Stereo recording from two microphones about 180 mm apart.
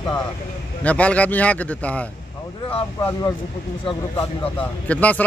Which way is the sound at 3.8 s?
30° left (ahead or behind).